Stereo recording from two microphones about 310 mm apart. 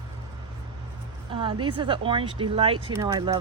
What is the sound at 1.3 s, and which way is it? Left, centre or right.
Speech, centre.